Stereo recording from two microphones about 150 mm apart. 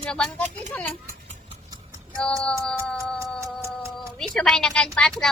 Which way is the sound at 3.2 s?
20° right (ahead or behind).